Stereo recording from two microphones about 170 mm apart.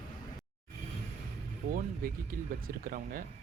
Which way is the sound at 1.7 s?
55° right (ahead or behind).